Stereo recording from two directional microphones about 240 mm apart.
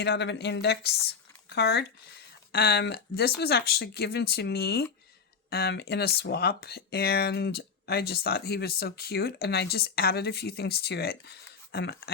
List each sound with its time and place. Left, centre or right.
0.0 s a woman's voice: left